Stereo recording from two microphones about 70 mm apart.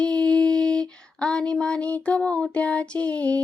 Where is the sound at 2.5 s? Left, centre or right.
Centre.